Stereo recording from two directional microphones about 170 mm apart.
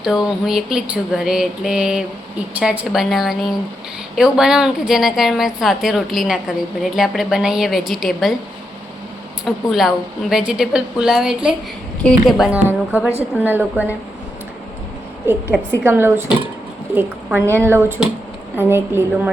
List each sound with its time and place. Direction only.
0.0 s a woman's voice: 5° right (ahead or behind)
9.4 s a woman's voice: centre (ahead or behind)
15.8 s speech: 15° right (ahead or behind)